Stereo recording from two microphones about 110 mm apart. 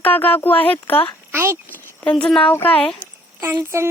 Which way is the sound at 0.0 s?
15° left (ahead or behind).